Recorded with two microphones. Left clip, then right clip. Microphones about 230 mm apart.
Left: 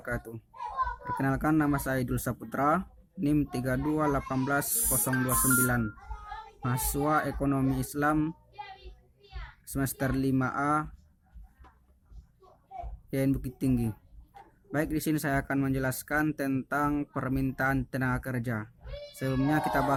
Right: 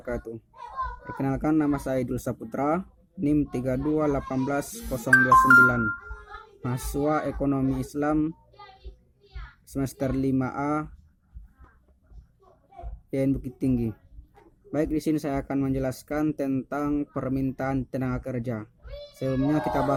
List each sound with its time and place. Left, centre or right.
0.1 s speech: left
6.7 s speech: left
9.6 s speech: left
13.1 s speech: left